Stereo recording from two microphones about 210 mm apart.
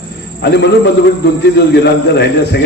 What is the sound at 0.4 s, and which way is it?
A man's voice, 55° left (ahead or behind).